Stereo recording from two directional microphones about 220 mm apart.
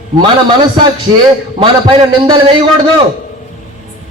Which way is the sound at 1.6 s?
20° right (ahead or behind).